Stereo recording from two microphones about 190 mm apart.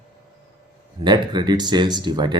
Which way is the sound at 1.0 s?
25° right (ahead or behind).